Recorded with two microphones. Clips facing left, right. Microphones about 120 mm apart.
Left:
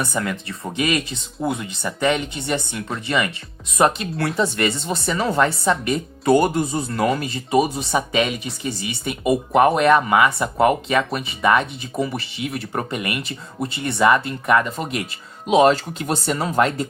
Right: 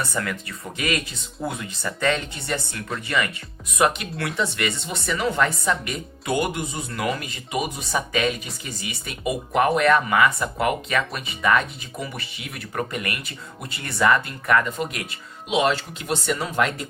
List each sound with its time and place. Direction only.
0.0 s speech: 20° left (ahead or behind)
3.8 s speech: 35° left (ahead or behind)
15.4 s speech: 40° left (ahead or behind)